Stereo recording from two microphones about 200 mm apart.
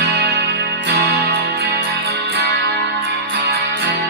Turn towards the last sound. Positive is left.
turn(degrees=-55)  # may be behind; listen again after turning